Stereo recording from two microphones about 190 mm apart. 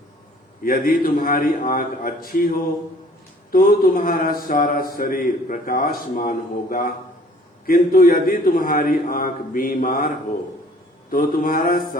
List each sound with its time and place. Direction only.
0.6 s speech: 50° left (ahead or behind)
3.5 s speech: 50° left (ahead or behind)
11.1 s speech: 50° left (ahead or behind)